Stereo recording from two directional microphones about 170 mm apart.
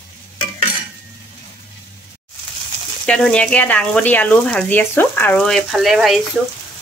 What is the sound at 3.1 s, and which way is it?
Speech, 5° left (ahead or behind).